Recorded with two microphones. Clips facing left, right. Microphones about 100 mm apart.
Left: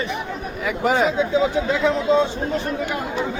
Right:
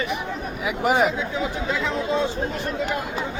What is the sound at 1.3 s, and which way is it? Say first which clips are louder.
Speech: left 6 dB; 20° left (ahead or behind).